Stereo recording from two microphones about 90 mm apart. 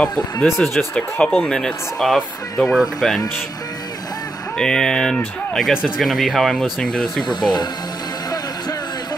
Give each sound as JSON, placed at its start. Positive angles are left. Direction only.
{"t": 0.5, "sound": "speech", "side_deg": 5}
{"t": 4.6, "sound": "speech", "side_deg": 5}
{"t": 7.2, "sound": "speech", "side_deg": 55}